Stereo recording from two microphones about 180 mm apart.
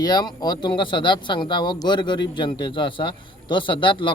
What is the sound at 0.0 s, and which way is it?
Speech, 20° left (ahead or behind).